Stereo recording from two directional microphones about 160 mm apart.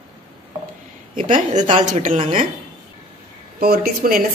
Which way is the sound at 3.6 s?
70° right (ahead or behind).